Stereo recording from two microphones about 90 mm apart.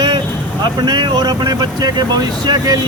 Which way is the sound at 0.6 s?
55° right (ahead or behind).